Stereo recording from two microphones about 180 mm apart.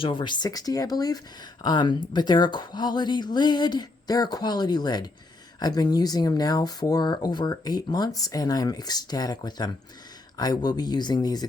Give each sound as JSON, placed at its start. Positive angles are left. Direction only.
{"t": 0.0, "sound": "speech", "side_deg": 25}